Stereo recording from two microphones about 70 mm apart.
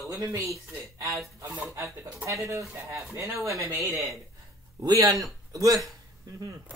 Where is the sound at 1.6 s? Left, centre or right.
Right.